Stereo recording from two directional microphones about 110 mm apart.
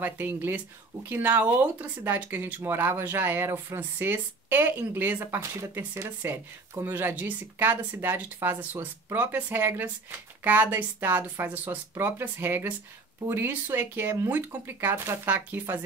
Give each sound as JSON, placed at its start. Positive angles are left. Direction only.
{"t": 0.0, "sound": "a woman's voice", "side_deg": -20}